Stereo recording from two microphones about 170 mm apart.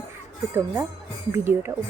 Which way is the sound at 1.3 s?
15° right (ahead or behind).